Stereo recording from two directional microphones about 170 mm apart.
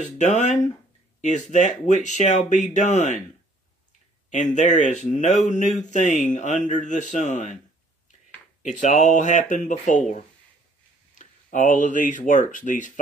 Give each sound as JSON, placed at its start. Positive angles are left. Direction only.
{"t": 0.0, "sound": "speech", "side_deg": 45}
{"t": 4.3, "sound": "speech", "side_deg": 45}
{"t": 8.6, "sound": "speech", "side_deg": 45}